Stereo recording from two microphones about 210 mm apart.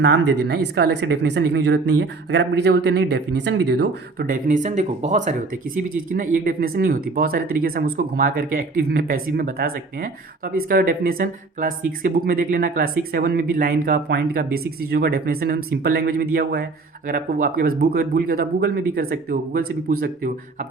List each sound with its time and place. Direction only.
0.0 s speech: 55° right (ahead or behind)